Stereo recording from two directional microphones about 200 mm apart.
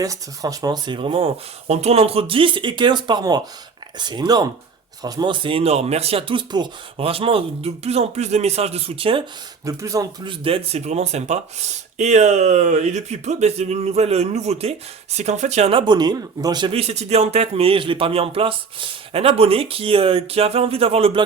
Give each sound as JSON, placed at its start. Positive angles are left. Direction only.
{"t": 0.0, "sound": "speech", "side_deg": -15}
{"t": 9.6, "sound": "speech", "side_deg": -15}